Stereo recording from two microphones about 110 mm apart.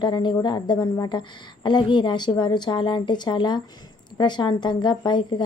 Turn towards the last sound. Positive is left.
turn(degrees=45)  # may be behind; listen again after turning